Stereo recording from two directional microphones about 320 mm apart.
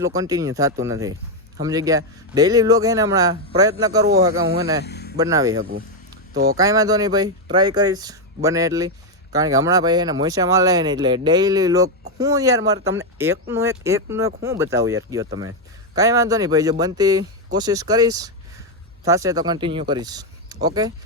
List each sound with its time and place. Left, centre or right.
0.0 s speech: centre
4.4 s speech: right
4.9 s a sound: left
5.1 s speech: centre
6.3 s speech: right
6.6 s speech: centre